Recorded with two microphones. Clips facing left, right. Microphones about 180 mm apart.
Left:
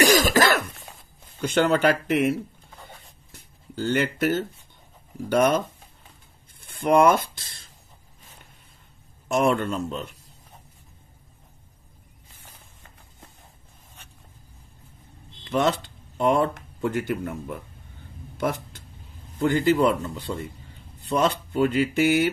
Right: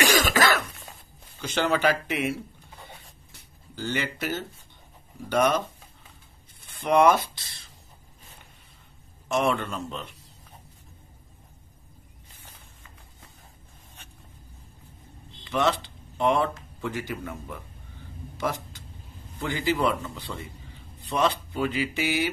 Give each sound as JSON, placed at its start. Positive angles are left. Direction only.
{"t": 0.0, "sound": "cough", "side_deg": 35}
{"t": 1.4, "sound": "speech", "side_deg": 55}
{"t": 3.3, "sound": "speech", "side_deg": 55}
{"t": 6.6, "sound": "speech", "side_deg": 50}
{"t": 9.3, "sound": "speech", "side_deg": 50}
{"t": 15.5, "sound": "speech", "side_deg": 50}